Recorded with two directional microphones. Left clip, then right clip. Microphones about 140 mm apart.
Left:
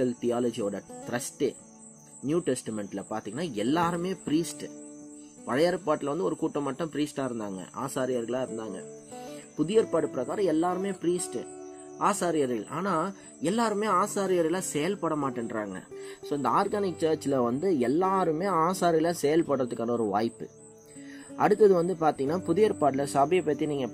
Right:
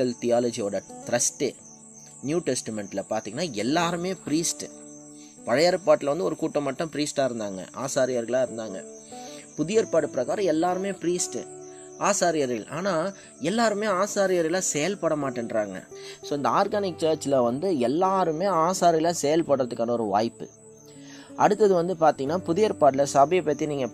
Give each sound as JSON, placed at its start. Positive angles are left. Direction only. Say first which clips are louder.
{"t": 0.0, "sound": "speech", "louder": "right 4 dB", "side_deg": -50}
{"t": 16.3, "sound": "speech", "louder": "right 3 dB", "side_deg": -35}